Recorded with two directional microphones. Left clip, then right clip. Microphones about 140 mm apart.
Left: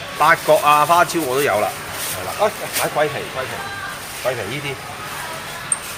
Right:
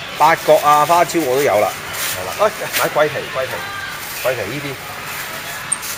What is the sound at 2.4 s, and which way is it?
Speech, 35° right (ahead or behind).